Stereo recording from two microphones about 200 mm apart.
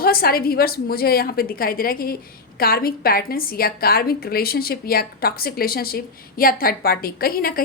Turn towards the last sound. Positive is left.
turn(degrees=45)  # may be behind; listen again after turning